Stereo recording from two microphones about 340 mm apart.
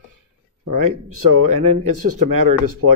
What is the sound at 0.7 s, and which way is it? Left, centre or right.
Speech, right.